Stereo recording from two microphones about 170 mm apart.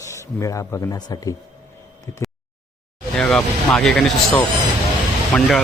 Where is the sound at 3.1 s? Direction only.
5° left (ahead or behind).